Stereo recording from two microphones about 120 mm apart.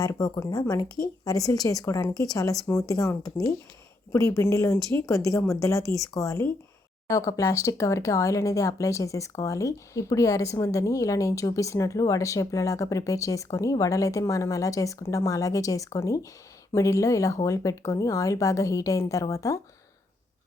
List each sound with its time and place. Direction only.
0.0 s speech: 25° left (ahead or behind)